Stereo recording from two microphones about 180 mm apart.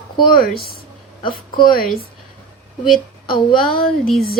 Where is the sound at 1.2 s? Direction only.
25° left (ahead or behind).